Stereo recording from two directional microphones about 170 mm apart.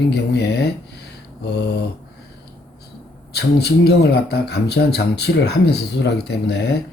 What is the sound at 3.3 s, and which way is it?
Speech, 70° left (ahead or behind).